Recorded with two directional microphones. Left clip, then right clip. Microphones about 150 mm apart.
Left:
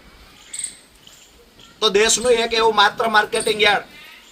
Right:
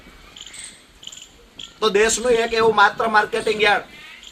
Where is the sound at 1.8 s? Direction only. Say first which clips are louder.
Left 1 dB; 5° left (ahead or behind).